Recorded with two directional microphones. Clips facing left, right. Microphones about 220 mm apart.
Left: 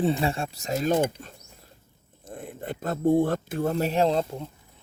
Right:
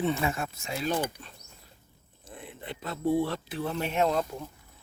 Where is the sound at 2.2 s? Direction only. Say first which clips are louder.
Left 7 dB; 45° left (ahead or behind); by 4.5 s 25° left (ahead or behind).